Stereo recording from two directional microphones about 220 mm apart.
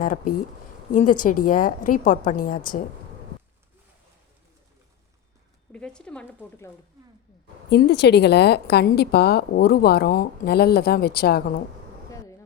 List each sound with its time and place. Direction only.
0.9 s a woman's voice: 35° left (ahead or behind)
5.7 s speech: 5° left (ahead or behind)
7.7 s a woman's voice: 50° left (ahead or behind)